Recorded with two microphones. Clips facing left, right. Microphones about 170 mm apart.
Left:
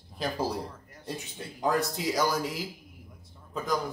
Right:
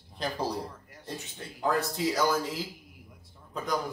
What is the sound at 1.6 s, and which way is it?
Speech, 15° left (ahead or behind).